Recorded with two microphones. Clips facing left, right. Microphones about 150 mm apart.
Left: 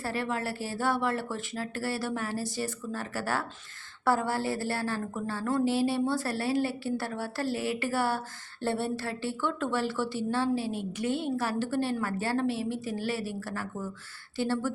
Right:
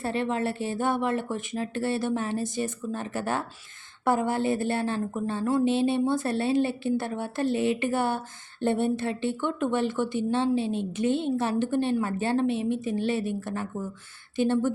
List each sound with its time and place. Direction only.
0.0 s speech: 20° right (ahead or behind)